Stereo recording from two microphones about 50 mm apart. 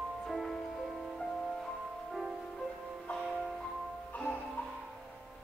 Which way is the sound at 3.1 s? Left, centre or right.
Left.